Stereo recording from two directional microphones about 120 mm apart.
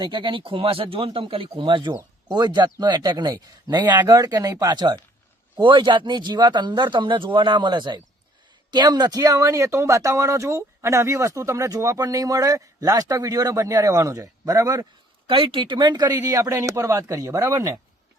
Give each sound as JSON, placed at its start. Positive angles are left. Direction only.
{"t": 0.0, "sound": "speech", "side_deg": -40}
{"t": 15.3, "sound": "speech", "side_deg": -45}